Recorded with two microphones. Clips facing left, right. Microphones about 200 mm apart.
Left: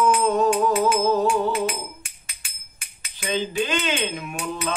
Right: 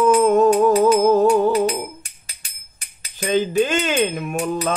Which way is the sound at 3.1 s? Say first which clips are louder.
Right 7 dB; 45° right (ahead or behind).